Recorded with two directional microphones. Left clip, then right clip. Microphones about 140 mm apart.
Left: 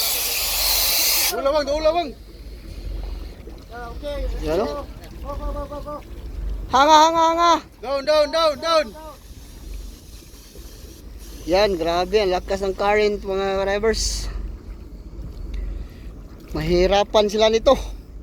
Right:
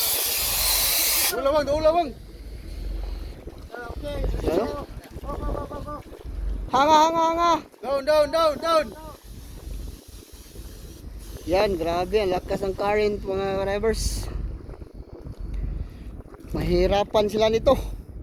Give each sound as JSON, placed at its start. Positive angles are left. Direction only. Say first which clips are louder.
{"t": 0.3, "sound": "hiss", "louder": "left 3 dB", "side_deg": 0}
{"t": 1.5, "sound": "speech", "louder": "left 1 dB", "side_deg": -50}
{"t": 4.0, "sound": "speech", "louder": "left 1 dB", "side_deg": 0}
{"t": 6.7, "sound": "speech", "louder": "left 4 dB", "side_deg": -5}
{"t": 7.8, "sound": "speech", "louder": "left 2 dB", "side_deg": -45}
{"t": 11.4, "sound": "speech", "louder": "left 4 dB", "side_deg": -5}
{"t": 16.6, "sound": "speech", "louder": "left 4 dB", "side_deg": -5}